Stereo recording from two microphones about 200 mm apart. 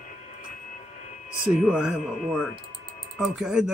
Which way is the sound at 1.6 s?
5° right (ahead or behind).